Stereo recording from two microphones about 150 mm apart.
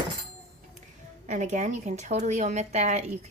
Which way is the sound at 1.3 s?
50° right (ahead or behind).